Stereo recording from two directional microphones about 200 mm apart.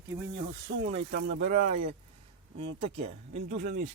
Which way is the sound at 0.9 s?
35° right (ahead or behind).